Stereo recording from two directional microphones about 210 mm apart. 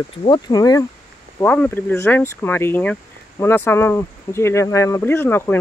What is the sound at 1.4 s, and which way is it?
Speech, 5° left (ahead or behind).